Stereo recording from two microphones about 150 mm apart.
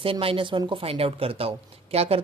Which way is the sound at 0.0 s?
40° right (ahead or behind).